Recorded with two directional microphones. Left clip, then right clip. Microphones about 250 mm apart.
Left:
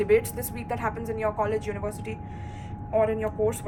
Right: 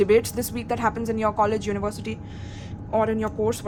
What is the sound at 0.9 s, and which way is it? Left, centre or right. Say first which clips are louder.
Speech: right 5 dB; right.